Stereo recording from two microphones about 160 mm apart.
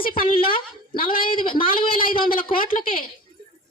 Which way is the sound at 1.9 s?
60° left (ahead or behind).